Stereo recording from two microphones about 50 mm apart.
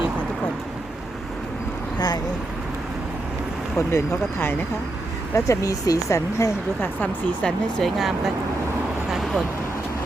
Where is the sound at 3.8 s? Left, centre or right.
Left.